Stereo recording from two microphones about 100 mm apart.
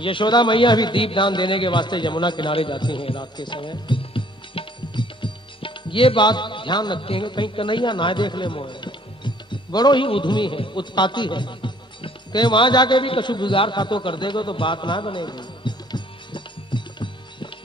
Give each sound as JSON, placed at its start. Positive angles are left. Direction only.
{"t": 0.0, "sound": "a man's voice", "side_deg": 55}
{"t": 10.0, "sound": "a man's voice", "side_deg": 55}